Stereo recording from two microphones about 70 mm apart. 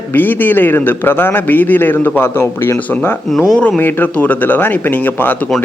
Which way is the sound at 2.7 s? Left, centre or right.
Left.